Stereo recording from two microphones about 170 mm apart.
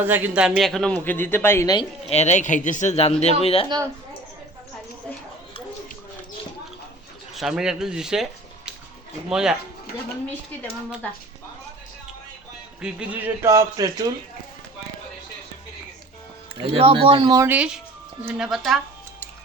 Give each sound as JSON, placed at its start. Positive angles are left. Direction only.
{"t": 0.0, "sound": "a man's voice", "side_deg": -10}
{"t": 2.0, "sound": "speech", "side_deg": 40}
{"t": 7.3, "sound": "speech", "side_deg": 0}
{"t": 12.8, "sound": "speech", "side_deg": -10}
{"t": 16.6, "sound": "speech", "side_deg": -35}